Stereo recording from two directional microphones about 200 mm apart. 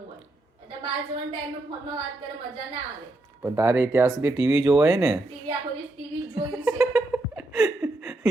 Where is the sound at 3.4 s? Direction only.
15° right (ahead or behind).